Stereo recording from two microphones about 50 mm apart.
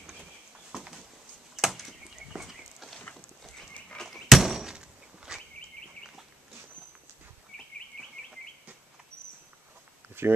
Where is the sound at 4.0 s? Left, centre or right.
Centre.